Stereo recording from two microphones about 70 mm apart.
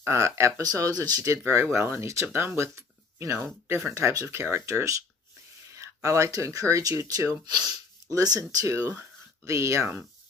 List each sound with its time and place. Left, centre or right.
0.0 s speech: right
0.6 s speech: right
1.2 s speech: right
7.4 s speech: right
8.6 s speech: right